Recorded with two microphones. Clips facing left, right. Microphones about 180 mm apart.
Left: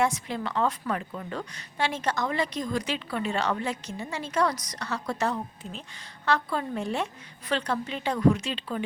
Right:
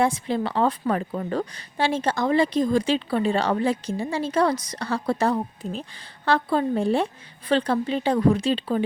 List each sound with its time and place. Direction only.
0.0 s a woman's voice: 30° right (ahead or behind)